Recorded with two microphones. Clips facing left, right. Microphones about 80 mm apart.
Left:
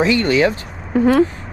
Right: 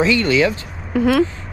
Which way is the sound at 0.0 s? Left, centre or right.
Left.